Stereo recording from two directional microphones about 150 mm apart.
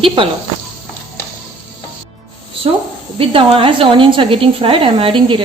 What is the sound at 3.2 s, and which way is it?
A woman's voice, 35° right (ahead or behind).